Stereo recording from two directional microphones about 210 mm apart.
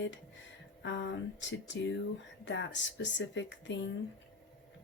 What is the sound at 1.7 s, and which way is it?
Speech, 60° left (ahead or behind).